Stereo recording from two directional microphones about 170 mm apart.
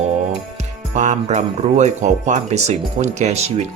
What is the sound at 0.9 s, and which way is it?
Speech, 45° right (ahead or behind).